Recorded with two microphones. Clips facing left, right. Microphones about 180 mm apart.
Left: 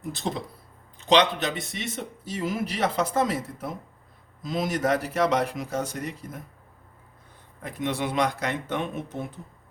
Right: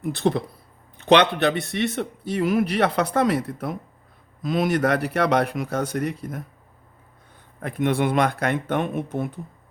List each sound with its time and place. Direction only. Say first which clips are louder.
0.0 s speech: right 8 dB; 60° right (ahead or behind)
7.6 s speech: right 6 dB; 55° right (ahead or behind)